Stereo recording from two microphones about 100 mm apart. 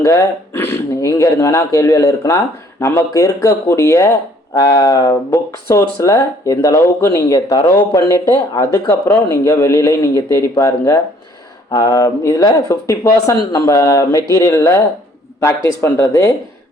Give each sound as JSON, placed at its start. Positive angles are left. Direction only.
{"t": 0.0, "sound": "speech", "side_deg": 30}